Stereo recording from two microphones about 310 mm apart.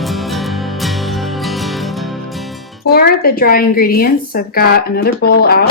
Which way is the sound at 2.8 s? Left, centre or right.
Left.